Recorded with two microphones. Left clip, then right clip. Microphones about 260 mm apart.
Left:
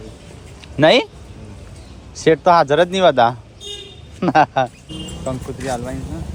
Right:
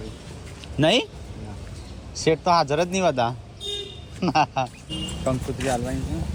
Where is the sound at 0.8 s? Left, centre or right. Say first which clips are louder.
Left 8 dB; left.